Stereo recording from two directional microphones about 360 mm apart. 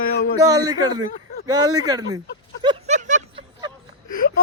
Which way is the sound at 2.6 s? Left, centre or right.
Centre.